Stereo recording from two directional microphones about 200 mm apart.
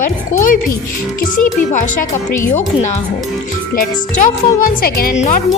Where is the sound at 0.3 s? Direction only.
40° left (ahead or behind).